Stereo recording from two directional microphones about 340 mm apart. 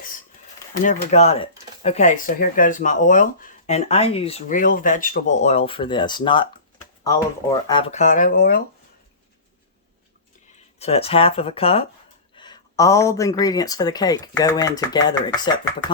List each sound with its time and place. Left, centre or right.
0.9 s speech: centre
7.7 s speech: centre
10.8 s speech: centre